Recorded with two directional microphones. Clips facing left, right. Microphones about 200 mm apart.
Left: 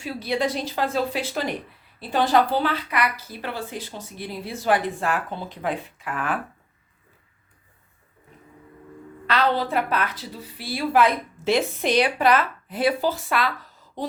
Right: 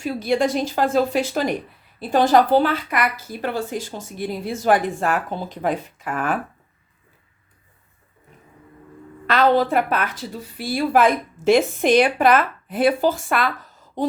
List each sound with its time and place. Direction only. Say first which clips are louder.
0.0 s a woman's voice: right 5 dB; 45° right (ahead or behind)
9.2 s a woman's voice: right 6 dB; 50° right (ahead or behind)